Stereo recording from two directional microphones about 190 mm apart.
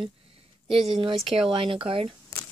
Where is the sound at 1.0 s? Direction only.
Centre (ahead or behind).